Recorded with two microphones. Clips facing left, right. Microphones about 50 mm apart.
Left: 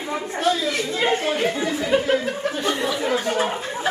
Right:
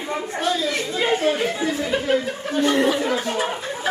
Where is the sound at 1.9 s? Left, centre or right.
Centre.